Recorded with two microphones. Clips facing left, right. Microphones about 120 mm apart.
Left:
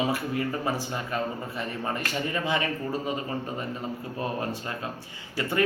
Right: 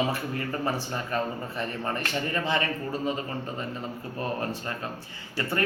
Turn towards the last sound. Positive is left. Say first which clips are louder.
# left 3 dB
turn(degrees=15)  # may be behind; listen again after turning